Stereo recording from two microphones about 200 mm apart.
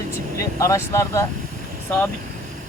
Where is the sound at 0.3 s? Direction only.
15° left (ahead or behind).